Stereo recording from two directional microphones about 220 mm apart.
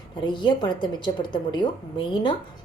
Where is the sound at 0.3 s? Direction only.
20° left (ahead or behind).